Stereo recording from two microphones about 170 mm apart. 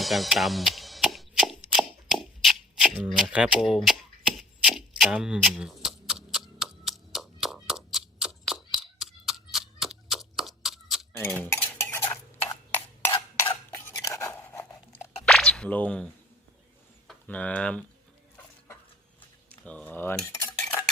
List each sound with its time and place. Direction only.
0.0 s cap gun: centre (ahead or behind)
4.4 s a sound: centre (ahead or behind)
11.3 s stir: 15° left (ahead or behind)
15.3 s a sound: centre (ahead or behind)
17.1 s speech: 10° left (ahead or behind)
19.6 s cutlery: 10° left (ahead or behind)